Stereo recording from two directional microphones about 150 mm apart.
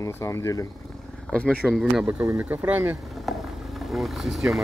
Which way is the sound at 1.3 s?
5° left (ahead or behind).